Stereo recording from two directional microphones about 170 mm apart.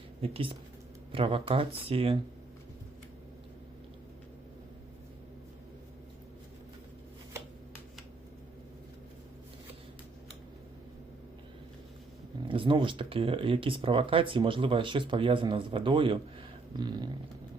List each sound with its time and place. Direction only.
0.2 s speech: 35° right (ahead or behind)
12.5 s speech: 30° right (ahead or behind)